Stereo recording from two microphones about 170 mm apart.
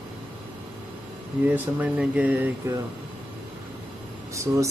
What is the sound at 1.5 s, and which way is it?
Speech, 10° right (ahead or behind).